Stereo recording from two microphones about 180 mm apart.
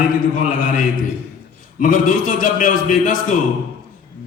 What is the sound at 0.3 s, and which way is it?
Speech, 50° left (ahead or behind).